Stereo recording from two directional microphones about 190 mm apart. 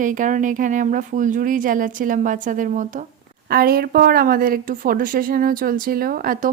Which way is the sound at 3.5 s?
50° right (ahead or behind).